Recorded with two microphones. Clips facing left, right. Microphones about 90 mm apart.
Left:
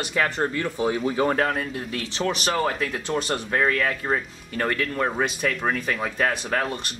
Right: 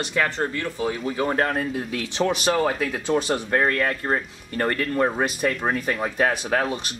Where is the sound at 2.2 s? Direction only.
5° right (ahead or behind).